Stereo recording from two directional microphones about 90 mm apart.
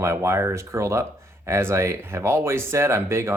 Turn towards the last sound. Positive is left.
turn(degrees=-30)  # may be behind; listen again after turning